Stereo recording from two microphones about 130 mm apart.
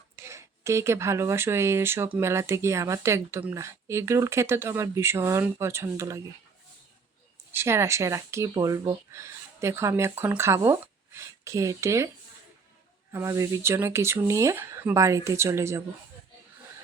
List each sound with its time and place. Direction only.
0.2 s speech: 20° right (ahead or behind)
7.5 s speech: 20° right (ahead or behind)